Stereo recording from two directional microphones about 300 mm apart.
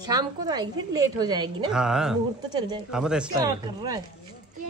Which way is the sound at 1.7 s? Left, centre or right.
Centre.